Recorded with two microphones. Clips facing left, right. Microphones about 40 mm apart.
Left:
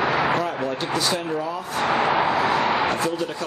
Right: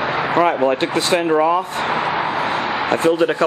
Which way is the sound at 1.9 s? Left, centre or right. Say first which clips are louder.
Left 2 dB; centre.